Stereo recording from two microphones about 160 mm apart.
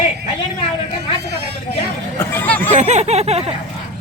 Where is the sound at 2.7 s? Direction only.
45° right (ahead or behind).